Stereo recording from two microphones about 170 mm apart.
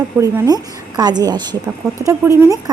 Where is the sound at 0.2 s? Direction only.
20° right (ahead or behind).